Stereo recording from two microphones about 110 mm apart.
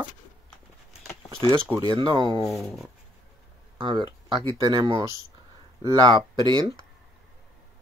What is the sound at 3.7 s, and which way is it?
Speech, 50° right (ahead or behind).